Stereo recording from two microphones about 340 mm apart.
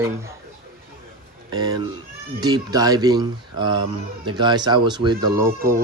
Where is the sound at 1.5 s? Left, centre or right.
Centre.